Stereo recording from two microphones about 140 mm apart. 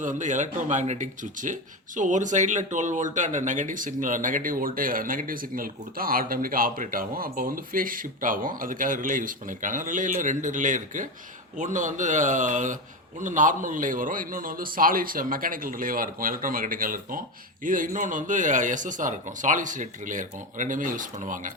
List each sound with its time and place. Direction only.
0.0 s speech: 65° right (ahead or behind)